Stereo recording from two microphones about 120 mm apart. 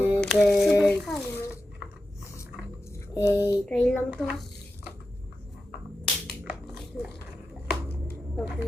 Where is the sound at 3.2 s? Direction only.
20° right (ahead or behind).